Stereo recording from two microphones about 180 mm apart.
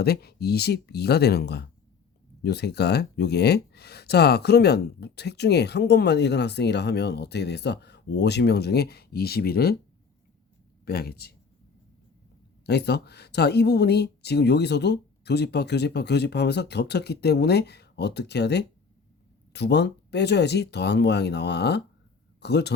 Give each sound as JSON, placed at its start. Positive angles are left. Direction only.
{"t": 0.0, "sound": "speech", "side_deg": 60}
{"t": 10.8, "sound": "speech", "side_deg": 60}
{"t": 12.6, "sound": "speech", "side_deg": 65}